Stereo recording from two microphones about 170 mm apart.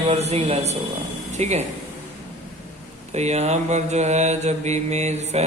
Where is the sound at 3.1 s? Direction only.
40° right (ahead or behind).